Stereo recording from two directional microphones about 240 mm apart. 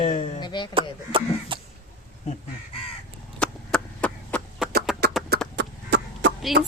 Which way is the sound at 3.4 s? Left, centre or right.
Centre.